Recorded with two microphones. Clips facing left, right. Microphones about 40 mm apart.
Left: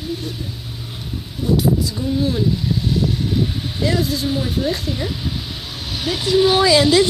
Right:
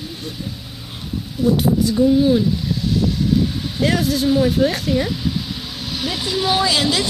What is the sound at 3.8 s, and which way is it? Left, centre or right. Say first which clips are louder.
Speech: right 3 dB; right.